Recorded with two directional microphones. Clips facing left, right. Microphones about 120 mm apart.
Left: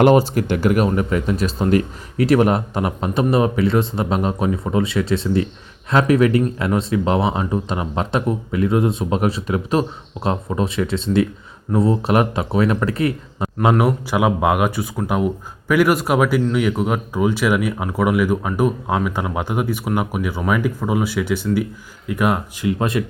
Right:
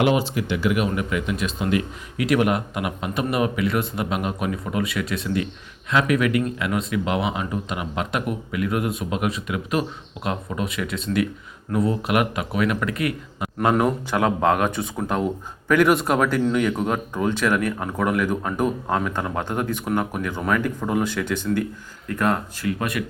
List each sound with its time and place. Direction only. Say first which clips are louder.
0.0 s speech: left 7 dB; 45° left (ahead or behind)
13.6 s speech: left 3 dB; 10° left (ahead or behind)
22.8 s speech: left 7 dB; 25° left (ahead or behind)